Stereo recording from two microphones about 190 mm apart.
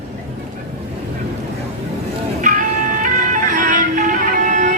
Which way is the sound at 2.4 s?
45° right (ahead or behind).